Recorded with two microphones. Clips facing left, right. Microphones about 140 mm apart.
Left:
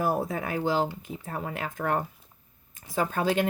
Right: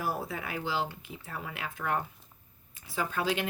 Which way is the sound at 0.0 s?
45° left (ahead or behind).